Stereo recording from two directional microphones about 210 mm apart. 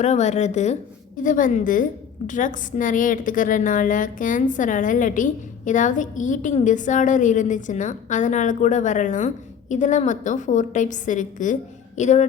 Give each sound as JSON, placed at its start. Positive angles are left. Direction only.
{"t": 0.0, "sound": "a woman's voice", "side_deg": 35}